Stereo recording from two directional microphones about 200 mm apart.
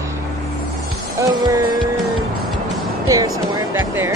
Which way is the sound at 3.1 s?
15° right (ahead or behind).